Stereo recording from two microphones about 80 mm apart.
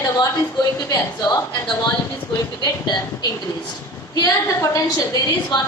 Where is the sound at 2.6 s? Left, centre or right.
Left.